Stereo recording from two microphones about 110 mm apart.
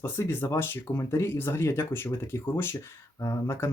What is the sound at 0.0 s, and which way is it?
Speech, 20° left (ahead or behind).